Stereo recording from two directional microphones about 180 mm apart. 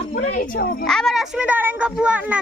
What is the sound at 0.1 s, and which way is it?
Speech, 45° left (ahead or behind).